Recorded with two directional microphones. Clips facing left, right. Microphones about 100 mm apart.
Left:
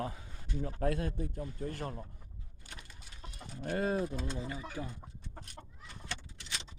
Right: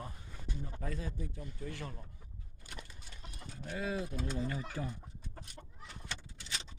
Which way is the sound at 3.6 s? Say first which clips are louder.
Left 5 dB; 55° left (ahead or behind).